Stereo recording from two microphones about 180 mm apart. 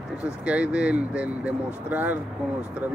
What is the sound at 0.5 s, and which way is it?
Speech, 5° right (ahead or behind).